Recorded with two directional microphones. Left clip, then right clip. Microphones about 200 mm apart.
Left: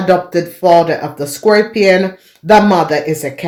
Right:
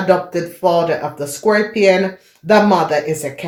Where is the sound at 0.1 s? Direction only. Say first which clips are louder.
Left 3 dB; 45° left (ahead or behind).